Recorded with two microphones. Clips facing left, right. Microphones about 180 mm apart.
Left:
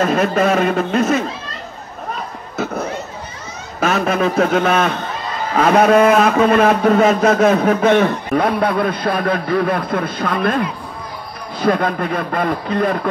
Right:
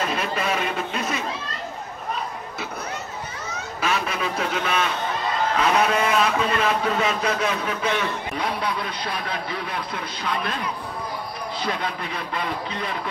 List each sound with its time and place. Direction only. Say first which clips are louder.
0.0 s a man's voice: left 10 dB; 50° left (ahead or behind)
2.5 s a sound: left 10 dB; 45° left (ahead or behind)
3.8 s a man's voice: left 9 dB; 50° left (ahead or behind)
11.6 s a man's voice: left 13 dB; 50° left (ahead or behind)